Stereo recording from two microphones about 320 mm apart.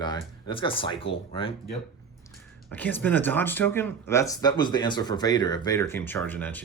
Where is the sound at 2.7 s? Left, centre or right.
Centre.